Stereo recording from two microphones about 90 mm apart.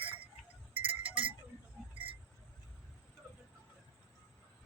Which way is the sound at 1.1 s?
75° right (ahead or behind).